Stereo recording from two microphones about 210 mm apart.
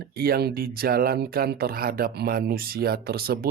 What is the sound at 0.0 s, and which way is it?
Speech, 45° right (ahead or behind).